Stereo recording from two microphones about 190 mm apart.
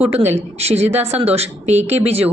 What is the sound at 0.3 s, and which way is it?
A woman's voice, 35° right (ahead or behind).